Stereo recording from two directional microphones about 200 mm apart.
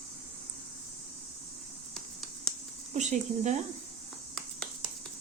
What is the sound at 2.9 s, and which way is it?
Speech, 35° right (ahead or behind).